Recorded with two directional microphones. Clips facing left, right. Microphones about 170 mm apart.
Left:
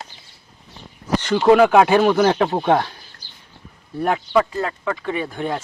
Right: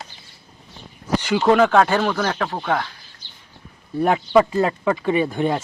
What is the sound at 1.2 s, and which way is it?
Speech, 5° right (ahead or behind).